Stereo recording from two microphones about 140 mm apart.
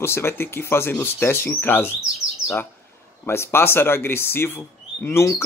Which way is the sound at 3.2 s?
20° left (ahead or behind).